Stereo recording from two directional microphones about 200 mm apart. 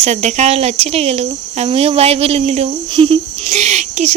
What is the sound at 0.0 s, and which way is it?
Cricket, 35° right (ahead or behind).